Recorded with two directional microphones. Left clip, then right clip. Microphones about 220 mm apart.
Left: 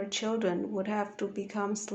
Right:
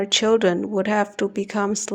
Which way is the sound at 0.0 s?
40° right (ahead or behind).